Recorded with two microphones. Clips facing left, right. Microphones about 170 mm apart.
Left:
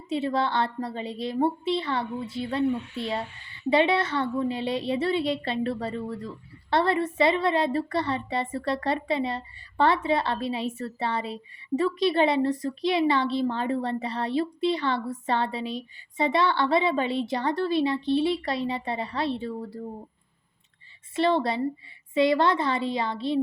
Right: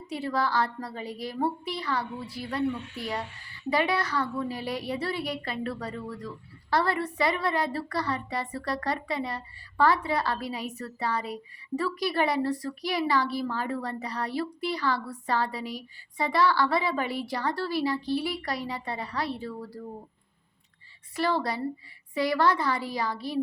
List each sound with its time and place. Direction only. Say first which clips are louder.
0.1 s a woman's voice: left 3 dB; 25° left (ahead or behind)
21.2 s a woman's voice: left 4 dB; 25° left (ahead or behind)